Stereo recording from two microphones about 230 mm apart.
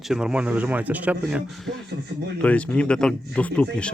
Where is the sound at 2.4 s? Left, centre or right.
Centre.